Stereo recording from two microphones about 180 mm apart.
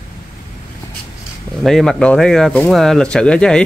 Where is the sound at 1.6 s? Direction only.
Centre (ahead or behind).